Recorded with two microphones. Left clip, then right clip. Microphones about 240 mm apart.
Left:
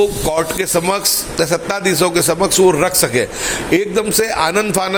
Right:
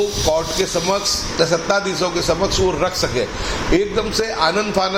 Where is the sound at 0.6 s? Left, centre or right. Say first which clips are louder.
Left 2 dB; left.